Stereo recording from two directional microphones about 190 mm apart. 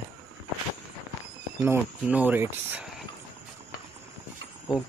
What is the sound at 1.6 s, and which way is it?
Speech, 10° right (ahead or behind).